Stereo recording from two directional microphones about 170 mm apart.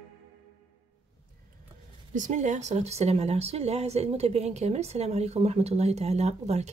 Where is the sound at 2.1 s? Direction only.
45° right (ahead or behind).